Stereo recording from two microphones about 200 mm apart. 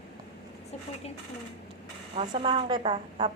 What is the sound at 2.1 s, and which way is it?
A woman's voice, 30° right (ahead or behind).